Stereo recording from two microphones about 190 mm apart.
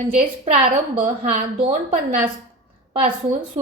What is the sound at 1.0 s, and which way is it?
A woman's voice, 30° right (ahead or behind).